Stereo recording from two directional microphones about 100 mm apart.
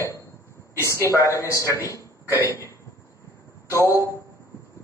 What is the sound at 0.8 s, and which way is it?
Speech, 30° left (ahead or behind).